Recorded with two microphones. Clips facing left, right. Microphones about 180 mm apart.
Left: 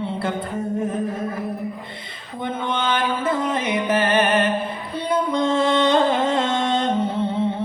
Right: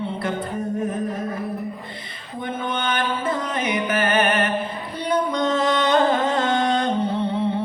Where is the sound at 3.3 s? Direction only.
25° left (ahead or behind).